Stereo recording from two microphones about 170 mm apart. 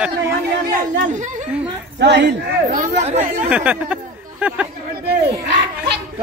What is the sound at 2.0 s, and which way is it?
Speech, 90° right.